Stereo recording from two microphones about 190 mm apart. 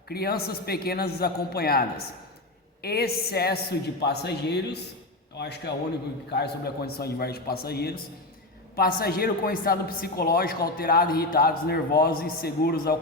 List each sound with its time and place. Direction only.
0.1 s a woman's voice: 55° left (ahead or behind)
2.8 s a woman's voice: 55° left (ahead or behind)